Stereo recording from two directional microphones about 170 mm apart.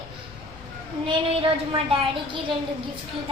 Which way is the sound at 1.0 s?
35° right (ahead or behind).